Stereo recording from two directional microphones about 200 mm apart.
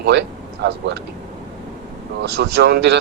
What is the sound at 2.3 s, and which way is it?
Speech, 55° right (ahead or behind).